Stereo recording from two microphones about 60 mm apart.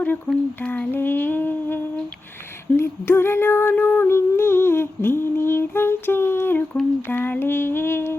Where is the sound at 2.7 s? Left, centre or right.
Left.